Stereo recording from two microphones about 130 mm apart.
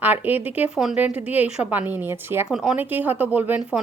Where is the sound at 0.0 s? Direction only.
15° right (ahead or behind).